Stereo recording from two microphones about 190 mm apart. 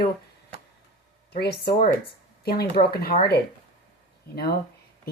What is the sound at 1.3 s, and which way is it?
Speech, 55° left (ahead or behind).